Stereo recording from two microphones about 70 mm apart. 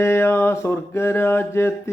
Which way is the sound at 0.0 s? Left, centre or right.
Left.